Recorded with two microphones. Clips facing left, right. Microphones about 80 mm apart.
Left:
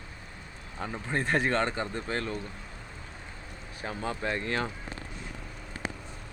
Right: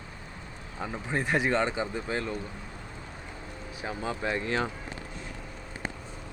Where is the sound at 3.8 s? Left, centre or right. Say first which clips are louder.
Right 1 dB; centre.